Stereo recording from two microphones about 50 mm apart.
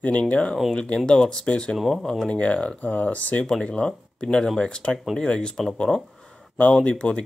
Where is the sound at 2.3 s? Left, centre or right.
Left.